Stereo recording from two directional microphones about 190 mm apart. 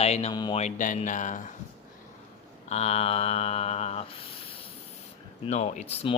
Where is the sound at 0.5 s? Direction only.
40° left (ahead or behind).